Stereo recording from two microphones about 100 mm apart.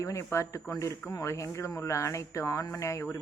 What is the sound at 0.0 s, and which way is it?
A man's voice, 30° left (ahead or behind).